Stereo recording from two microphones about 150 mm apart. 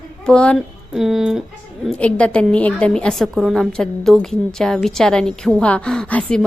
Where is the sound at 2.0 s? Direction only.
10° left (ahead or behind).